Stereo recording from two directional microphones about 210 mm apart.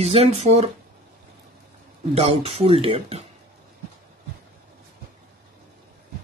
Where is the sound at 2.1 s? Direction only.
30° right (ahead or behind).